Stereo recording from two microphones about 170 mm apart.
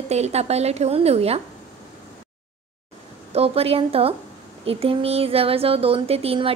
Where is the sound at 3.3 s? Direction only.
35° right (ahead or behind).